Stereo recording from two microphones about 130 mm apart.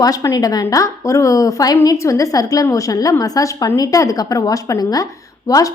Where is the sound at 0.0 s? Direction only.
25° left (ahead or behind).